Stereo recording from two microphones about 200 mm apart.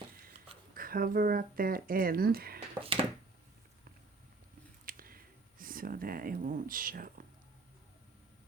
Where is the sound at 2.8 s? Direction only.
25° right (ahead or behind).